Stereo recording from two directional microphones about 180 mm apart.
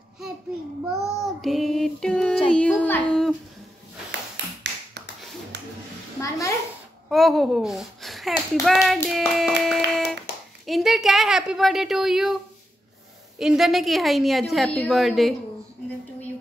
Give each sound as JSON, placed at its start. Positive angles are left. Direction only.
{"t": 0.8, "sound": "child singing", "side_deg": 0}
{"t": 5.5, "sound": "music", "side_deg": -70}
{"t": 6.2, "sound": "a child's voice", "side_deg": 20}
{"t": 7.1, "sound": "a child's voice", "side_deg": 0}
{"t": 8.6, "sound": "child singing", "side_deg": 0}
{"t": 10.6, "sound": "a woman's voice", "side_deg": 0}
{"t": 13.4, "sound": "a woman's voice", "side_deg": 0}